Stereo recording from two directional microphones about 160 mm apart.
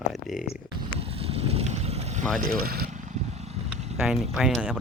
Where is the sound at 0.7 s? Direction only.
35° right (ahead or behind).